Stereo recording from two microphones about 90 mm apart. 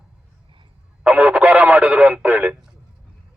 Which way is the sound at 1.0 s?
10° right (ahead or behind).